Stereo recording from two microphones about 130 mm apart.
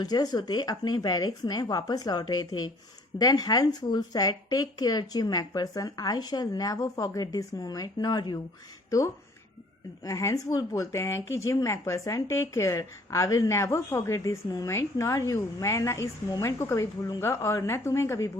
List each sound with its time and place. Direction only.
0.0 s speech: 30° left (ahead or behind)